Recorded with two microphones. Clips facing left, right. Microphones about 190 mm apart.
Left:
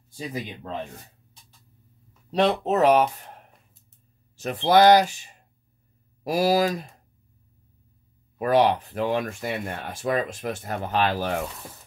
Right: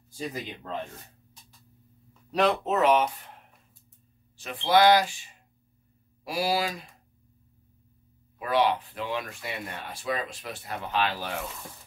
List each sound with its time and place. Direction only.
2.3 s speech: 35° left (ahead or behind)
4.4 s speech: 45° left (ahead or behind)
8.4 s speech: 45° left (ahead or behind)